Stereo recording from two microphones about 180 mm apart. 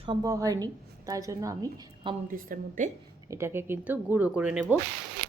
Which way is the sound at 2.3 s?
50° right (ahead or behind).